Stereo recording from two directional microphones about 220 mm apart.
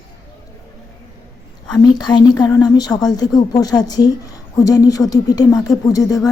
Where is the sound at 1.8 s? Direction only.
20° left (ahead or behind).